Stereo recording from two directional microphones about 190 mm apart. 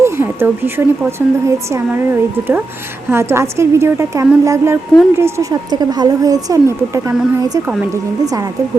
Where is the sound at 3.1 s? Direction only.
15° right (ahead or behind).